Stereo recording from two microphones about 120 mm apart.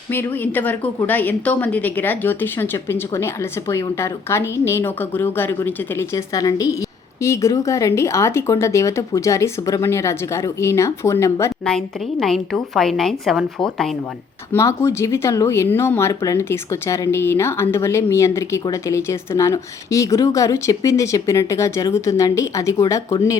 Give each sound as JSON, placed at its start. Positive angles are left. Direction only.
{"t": 0.1, "sound": "a woman's voice", "side_deg": 15}
{"t": 12.2, "sound": "a woman's voice", "side_deg": 5}
{"t": 14.5, "sound": "a woman's voice", "side_deg": 25}